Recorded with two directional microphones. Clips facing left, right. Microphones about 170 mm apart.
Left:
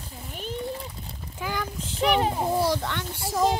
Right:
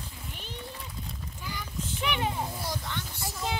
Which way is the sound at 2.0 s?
35° left (ahead or behind).